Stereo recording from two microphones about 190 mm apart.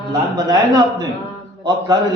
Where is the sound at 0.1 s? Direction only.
20° right (ahead or behind).